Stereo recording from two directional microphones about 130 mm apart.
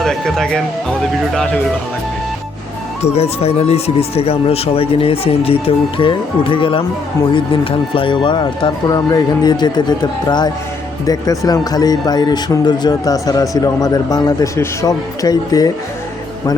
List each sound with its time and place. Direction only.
0.0 s speech: 5° left (ahead or behind)
3.2 s speech: 50° left (ahead or behind); by 15.7 s 30° left (ahead or behind)